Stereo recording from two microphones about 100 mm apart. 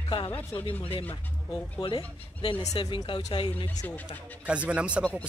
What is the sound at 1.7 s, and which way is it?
Speech, 60° left (ahead or behind).